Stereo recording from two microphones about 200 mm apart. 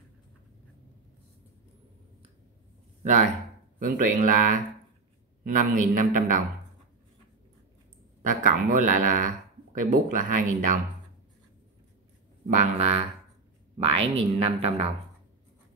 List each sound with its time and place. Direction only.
3.0 s a sound: 40° right (ahead or behind)
3.8 s a man's voice: 45° right (ahead or behind)
8.2 s a man's voice: 40° right (ahead or behind)
12.4 s a man's voice: 35° right (ahead or behind)